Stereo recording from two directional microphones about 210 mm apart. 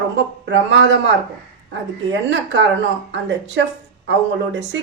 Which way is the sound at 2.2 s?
55° right (ahead or behind).